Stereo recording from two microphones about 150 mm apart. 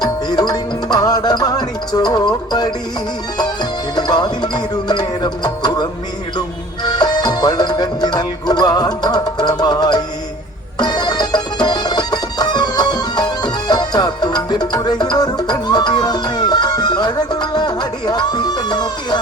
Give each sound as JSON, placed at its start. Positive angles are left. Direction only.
{"t": 0.0, "sound": "music", "side_deg": 25}